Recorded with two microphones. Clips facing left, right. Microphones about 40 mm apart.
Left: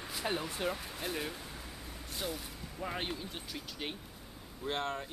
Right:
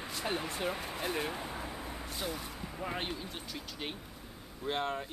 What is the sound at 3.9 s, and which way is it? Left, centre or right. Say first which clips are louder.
Vehicle: right 2 dB; centre.